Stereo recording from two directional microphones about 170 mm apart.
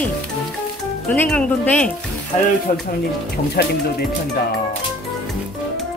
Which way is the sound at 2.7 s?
50° left (ahead or behind).